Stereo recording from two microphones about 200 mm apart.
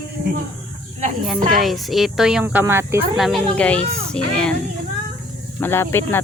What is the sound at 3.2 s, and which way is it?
Speech, centre (ahead or behind).